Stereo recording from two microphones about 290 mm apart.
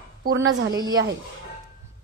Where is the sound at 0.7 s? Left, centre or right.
Centre.